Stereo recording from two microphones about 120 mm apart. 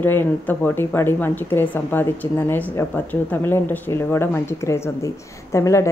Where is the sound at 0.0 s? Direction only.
15° left (ahead or behind).